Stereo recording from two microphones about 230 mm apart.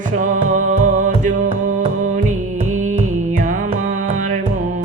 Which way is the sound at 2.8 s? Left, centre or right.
Right.